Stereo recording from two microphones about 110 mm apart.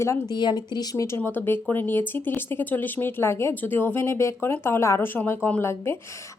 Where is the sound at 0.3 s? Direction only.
40° left (ahead or behind).